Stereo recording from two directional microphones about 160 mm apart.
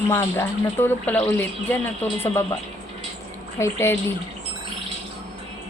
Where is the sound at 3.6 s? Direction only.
15° left (ahead or behind).